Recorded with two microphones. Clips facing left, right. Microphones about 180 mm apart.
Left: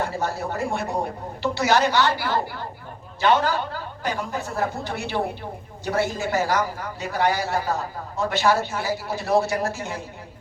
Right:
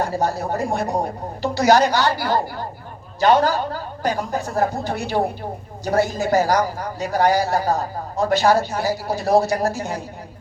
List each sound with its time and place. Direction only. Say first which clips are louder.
0.0 s a man's voice: right 4 dB; 40° right (ahead or behind)